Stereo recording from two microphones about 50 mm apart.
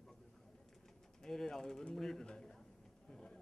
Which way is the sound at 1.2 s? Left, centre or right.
Centre.